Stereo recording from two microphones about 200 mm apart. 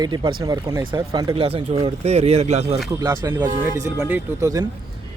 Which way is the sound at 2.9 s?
15° right (ahead or behind).